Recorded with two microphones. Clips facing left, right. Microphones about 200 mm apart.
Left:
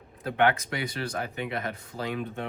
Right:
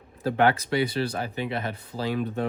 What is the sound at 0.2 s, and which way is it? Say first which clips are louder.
Speech: right 2 dB; 35° right (ahead or behind).